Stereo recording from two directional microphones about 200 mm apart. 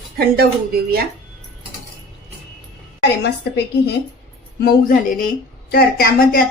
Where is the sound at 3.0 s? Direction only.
55° left (ahead or behind).